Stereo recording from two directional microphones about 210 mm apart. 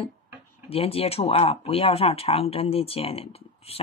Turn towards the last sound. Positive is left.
turn(degrees=30)  # may be behind; listen again after turning